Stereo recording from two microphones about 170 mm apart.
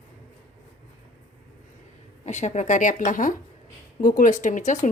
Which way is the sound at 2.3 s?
45° left (ahead or behind).